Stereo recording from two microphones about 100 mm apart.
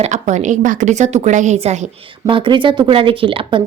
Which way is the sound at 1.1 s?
90° right.